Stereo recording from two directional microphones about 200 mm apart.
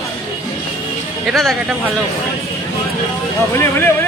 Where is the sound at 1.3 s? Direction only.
Centre (ahead or behind).